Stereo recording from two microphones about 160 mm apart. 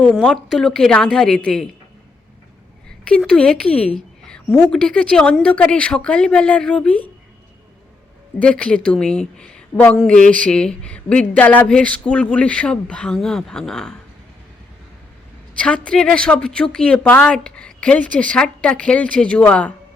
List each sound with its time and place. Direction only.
0.0 s a woman's voice: 5° left (ahead or behind)
3.2 s a woman's voice: 5° left (ahead or behind)
8.4 s a woman's voice: 5° left (ahead or behind)
15.5 s a woman's voice: 5° left (ahead or behind)